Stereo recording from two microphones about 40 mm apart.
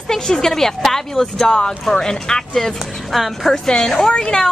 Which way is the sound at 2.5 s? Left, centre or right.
Centre.